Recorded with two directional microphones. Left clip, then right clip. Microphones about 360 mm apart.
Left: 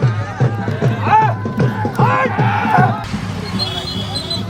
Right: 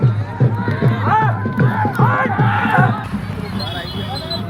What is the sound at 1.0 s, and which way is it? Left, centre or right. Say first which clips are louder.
Music: left 4 dB; left.